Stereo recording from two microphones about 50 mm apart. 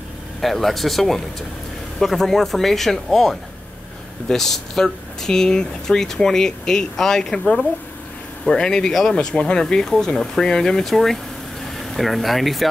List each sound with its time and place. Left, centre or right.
0.4 s speech: centre